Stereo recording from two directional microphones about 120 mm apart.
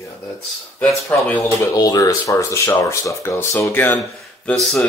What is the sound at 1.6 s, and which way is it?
Speech, 30° left (ahead or behind).